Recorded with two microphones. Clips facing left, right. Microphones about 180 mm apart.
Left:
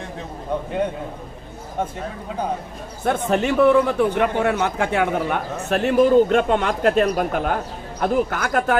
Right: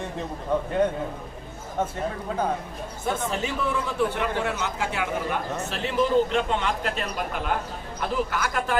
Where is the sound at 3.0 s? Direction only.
65° left (ahead or behind).